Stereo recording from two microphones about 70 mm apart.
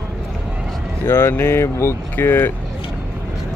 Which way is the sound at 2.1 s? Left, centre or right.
Left.